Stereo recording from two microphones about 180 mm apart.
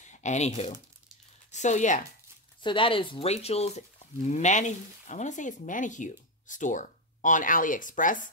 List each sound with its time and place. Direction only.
0.0 s a sound: 40° left (ahead or behind)
1.5 s speech: 40° left (ahead or behind)
2.6 s speech: 30° left (ahead or behind); by 8.3 s 45° left (ahead or behind)